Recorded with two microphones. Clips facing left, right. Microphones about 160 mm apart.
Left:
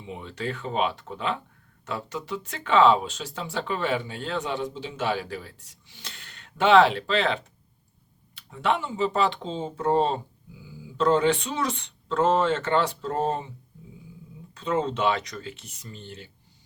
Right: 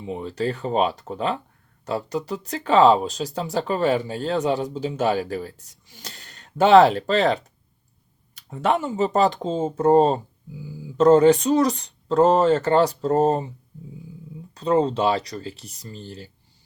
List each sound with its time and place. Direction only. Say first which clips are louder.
0.0 s speech: right 7 dB; 40° right (ahead or behind)
8.4 s speech: right 4 dB; 45° right (ahead or behind)
14.5 s speech: right 6 dB; 35° right (ahead or behind)